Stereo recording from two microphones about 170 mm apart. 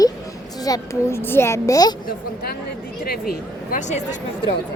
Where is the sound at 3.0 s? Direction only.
65° left (ahead or behind).